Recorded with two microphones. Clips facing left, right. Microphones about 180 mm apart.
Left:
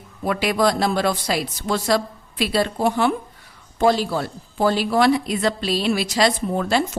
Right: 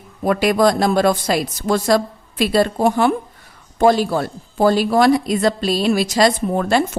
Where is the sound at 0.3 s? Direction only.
45° right (ahead or behind).